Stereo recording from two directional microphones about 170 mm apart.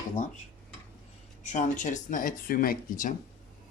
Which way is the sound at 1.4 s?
45° left (ahead or behind).